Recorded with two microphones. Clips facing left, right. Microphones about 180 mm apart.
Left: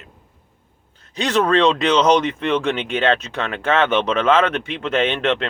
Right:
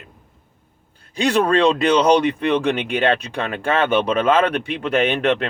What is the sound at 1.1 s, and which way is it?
Speech, 10° right (ahead or behind).